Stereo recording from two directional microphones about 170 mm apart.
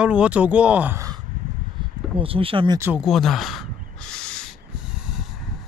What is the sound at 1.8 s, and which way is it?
Speech, 30° right (ahead or behind).